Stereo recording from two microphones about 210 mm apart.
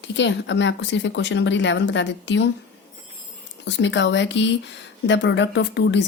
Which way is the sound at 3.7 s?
60° left (ahead or behind).